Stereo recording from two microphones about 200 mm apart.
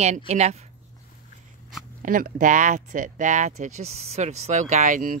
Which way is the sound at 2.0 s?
45° right (ahead or behind).